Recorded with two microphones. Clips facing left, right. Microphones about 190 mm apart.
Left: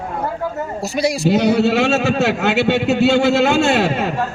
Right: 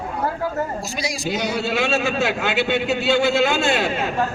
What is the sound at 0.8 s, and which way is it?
A man's voice, 60° left (ahead or behind).